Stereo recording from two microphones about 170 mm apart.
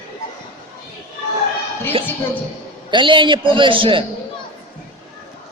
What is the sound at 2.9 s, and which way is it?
A man's voice, 30° right (ahead or behind).